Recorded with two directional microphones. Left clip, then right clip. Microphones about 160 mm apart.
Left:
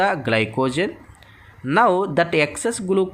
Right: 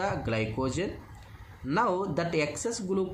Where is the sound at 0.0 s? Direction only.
50° left (ahead or behind).